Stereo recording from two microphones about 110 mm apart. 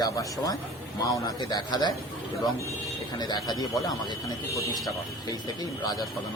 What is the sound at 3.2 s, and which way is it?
Speech, 40° left (ahead or behind).